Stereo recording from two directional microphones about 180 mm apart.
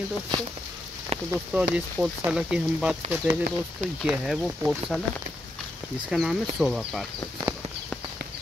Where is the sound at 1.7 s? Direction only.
5° right (ahead or behind).